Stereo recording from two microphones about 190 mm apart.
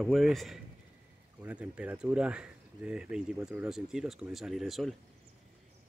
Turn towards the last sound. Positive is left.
turn(degrees=0)  # may be behind; listen again after turning